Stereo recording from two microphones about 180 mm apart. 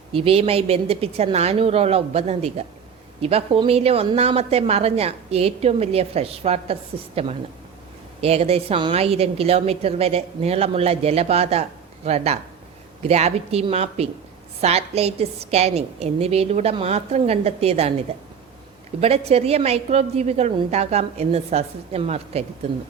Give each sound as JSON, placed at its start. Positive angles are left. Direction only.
{"t": 0.1, "sound": "speech", "side_deg": -30}
{"t": 18.9, "sound": "speech", "side_deg": -35}